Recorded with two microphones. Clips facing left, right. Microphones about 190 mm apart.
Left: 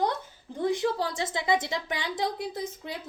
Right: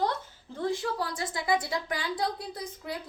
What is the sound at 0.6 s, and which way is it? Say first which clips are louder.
A woman's voice: left 4 dB; 20° left (ahead or behind).